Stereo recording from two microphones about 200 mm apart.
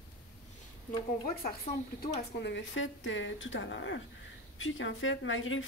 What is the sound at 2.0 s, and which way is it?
A woman's voice, 60° left (ahead or behind).